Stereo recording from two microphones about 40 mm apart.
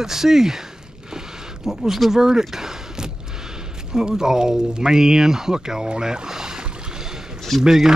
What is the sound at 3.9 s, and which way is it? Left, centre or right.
Speech, centre.